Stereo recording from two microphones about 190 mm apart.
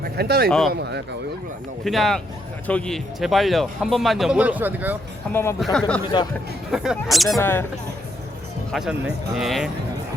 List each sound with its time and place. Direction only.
0.0 s speech: 55° right (ahead or behind)
1.8 s speech: centre (ahead or behind)
5.3 s speech: 15° left (ahead or behind)
5.5 s speech: centre (ahead or behind)
6.1 s speech: 25° left (ahead or behind)
6.7 s speech: 5° right (ahead or behind)
7.3 s speech: 10° left (ahead or behind)
8.7 s speech: centre (ahead or behind)